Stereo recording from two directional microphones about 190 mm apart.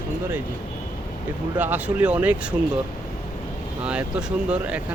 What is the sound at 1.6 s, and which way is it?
Speech, 10° right (ahead or behind).